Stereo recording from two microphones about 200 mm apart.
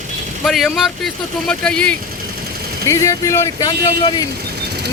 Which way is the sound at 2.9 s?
15° left (ahead or behind).